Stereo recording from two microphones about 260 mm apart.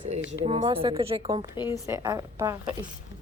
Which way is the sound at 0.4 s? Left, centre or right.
Right.